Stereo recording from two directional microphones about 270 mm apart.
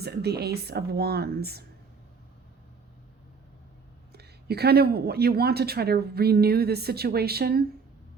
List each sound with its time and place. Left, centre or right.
0.0 s speech: right
4.1 s speech: right